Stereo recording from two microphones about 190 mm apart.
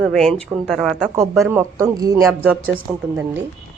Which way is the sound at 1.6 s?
15° right (ahead or behind).